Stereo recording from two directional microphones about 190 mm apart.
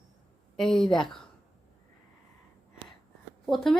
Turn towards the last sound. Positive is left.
turn(degrees=0)  # may be behind; listen again after turning